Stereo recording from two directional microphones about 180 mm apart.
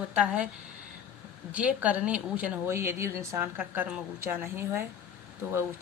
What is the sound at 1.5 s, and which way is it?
A woman's voice, 5° right (ahead or behind).